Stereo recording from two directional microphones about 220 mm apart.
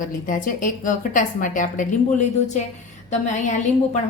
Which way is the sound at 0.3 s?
35° left (ahead or behind).